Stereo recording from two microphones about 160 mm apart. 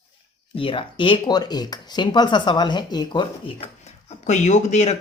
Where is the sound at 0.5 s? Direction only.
35° left (ahead or behind).